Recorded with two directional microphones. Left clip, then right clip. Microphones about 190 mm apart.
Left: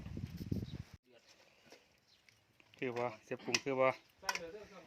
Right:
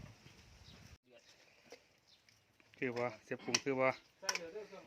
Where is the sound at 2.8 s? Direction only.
5° right (ahead or behind).